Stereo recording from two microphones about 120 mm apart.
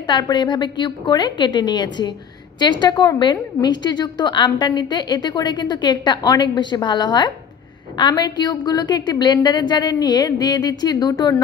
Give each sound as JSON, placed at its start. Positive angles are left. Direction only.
{"t": 0.0, "sound": "a woman's voice", "side_deg": 40}